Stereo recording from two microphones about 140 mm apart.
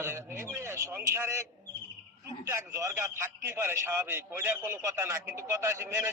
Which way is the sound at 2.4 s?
20° right (ahead or behind).